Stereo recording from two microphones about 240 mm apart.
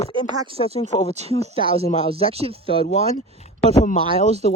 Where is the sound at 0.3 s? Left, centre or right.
Right.